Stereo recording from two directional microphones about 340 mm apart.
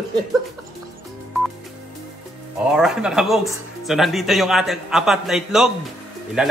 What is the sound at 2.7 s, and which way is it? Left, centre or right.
Speech, centre.